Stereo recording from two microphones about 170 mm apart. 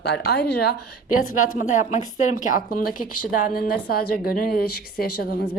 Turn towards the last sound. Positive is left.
turn(degrees=65)  # may be behind; listen again after turning